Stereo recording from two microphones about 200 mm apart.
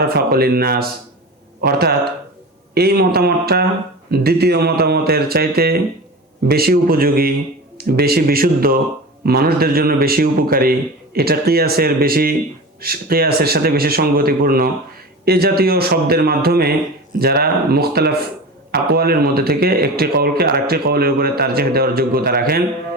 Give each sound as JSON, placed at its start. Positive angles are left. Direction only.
{"t": 0.0, "sound": "speech", "side_deg": -50}